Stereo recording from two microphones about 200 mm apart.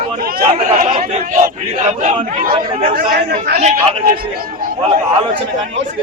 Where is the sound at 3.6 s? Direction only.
35° right (ahead or behind).